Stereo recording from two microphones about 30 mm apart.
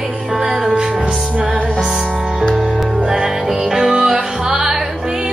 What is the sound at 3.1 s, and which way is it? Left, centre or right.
Music, right.